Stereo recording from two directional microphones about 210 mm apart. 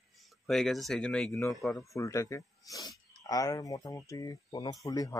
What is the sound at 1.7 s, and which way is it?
Speech, 15° left (ahead or behind).